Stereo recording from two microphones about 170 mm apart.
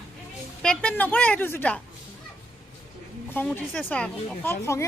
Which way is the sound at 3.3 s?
10° left (ahead or behind).